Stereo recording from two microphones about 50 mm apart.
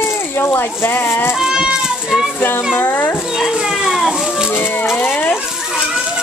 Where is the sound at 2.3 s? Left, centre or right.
Left.